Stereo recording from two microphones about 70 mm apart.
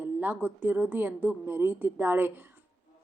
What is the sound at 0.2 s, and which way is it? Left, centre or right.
A woman's voice, right.